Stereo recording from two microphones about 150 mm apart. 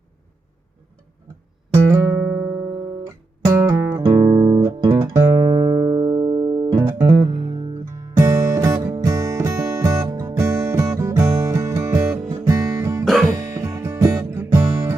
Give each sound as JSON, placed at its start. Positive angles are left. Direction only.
{"t": 1.7, "sound": "music", "side_deg": -15}
{"t": 5.1, "sound": "music", "side_deg": -15}
{"t": 8.1, "sound": "music", "side_deg": -20}
{"t": 12.5, "sound": "guitar", "side_deg": -20}
{"t": 13.2, "sound": "music", "side_deg": -20}